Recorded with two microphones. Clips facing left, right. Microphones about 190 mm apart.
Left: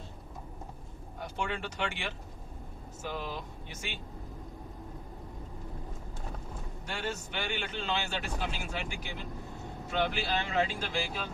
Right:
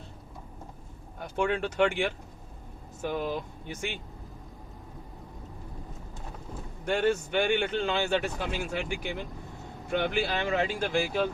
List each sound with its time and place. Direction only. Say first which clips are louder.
1.4 s speech: right 10 dB; 55° right (ahead or behind)
6.8 s speech: right 11 dB; 55° right (ahead or behind)